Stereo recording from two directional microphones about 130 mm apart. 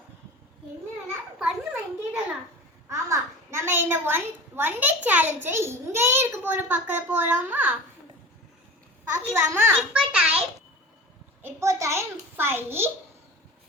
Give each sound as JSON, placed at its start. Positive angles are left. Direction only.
{"t": 1.4, "sound": "a sound", "side_deg": -5}
{"t": 2.9, "sound": "a sound", "side_deg": -20}
{"t": 5.0, "sound": "a child's voice", "side_deg": -15}
{"t": 9.3, "sound": "a child's voice", "side_deg": -20}
{"t": 9.9, "sound": "a child's voice", "side_deg": -10}
{"t": 11.4, "sound": "a child's voice", "side_deg": -20}